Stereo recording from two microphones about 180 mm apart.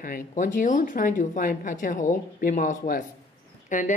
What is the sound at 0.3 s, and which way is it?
Speech, 45° left (ahead or behind).